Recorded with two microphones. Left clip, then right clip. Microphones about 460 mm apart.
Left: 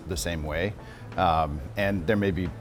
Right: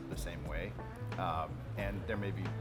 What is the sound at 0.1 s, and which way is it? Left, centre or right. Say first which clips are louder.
Speech: left 16 dB; left.